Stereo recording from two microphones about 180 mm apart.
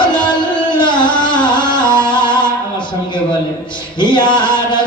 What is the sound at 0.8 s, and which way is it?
Music, 25° left (ahead or behind).